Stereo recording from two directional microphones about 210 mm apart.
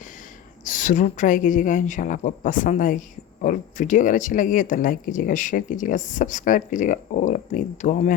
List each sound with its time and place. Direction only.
0.6 s speech: 35° left (ahead or behind)